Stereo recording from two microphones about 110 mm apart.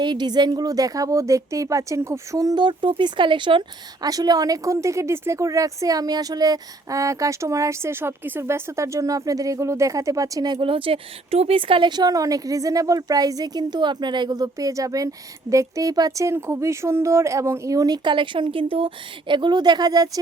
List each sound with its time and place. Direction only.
0.0 s speech: 40° right (ahead or behind)
4.0 s a woman's voice: 35° right (ahead or behind)
10.7 s speech: 55° right (ahead or behind)
19.3 s speech: 45° right (ahead or behind)